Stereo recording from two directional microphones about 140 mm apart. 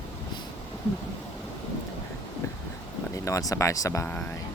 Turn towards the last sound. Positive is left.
turn(degrees=15)  # may be behind; listen again after turning